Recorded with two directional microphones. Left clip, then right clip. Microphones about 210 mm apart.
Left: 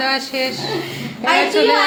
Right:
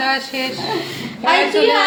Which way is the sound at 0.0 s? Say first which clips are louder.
Even; 15° left (ahead or behind).